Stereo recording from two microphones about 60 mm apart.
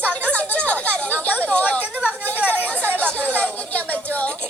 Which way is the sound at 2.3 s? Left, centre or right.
Left.